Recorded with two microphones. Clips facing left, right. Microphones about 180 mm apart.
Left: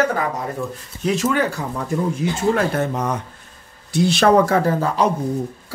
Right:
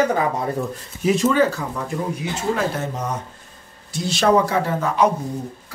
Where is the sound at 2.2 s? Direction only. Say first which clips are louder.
Left 4 dB; 55° left (ahead or behind).